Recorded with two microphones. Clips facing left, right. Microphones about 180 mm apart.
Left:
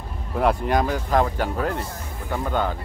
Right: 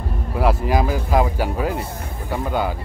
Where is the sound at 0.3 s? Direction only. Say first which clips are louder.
Right 1 dB; 5° right (ahead or behind).